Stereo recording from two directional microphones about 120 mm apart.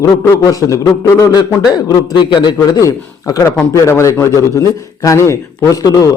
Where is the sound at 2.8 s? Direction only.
30° left (ahead or behind).